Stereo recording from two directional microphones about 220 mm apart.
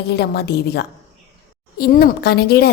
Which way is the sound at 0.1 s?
45° left (ahead or behind).